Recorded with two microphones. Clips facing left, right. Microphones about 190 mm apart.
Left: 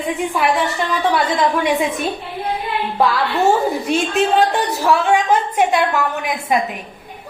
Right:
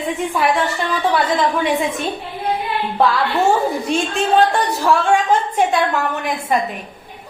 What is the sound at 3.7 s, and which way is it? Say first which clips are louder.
Speech: left 1 dB; 5° left (ahead or behind).